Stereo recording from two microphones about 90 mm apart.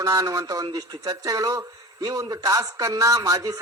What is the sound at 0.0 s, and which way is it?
Speech, 40° right (ahead or behind).